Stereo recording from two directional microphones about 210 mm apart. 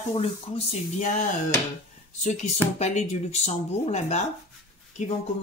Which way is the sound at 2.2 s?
35° left (ahead or behind).